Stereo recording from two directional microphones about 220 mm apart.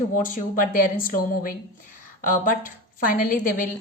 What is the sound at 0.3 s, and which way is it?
Speech, 40° left (ahead or behind).